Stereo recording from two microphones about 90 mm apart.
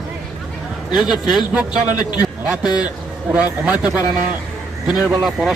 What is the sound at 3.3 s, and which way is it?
Speech, 15° right (ahead or behind).